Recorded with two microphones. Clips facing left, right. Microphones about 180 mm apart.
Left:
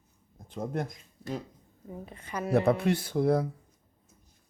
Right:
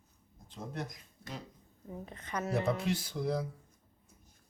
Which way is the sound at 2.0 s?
10° left (ahead or behind).